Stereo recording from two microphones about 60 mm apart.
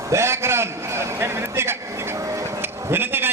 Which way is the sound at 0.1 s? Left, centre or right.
Right.